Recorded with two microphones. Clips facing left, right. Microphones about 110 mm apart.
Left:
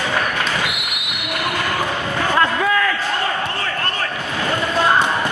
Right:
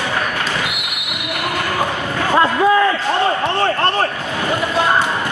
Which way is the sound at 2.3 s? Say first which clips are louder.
Right 5 dB; 25° right (ahead or behind).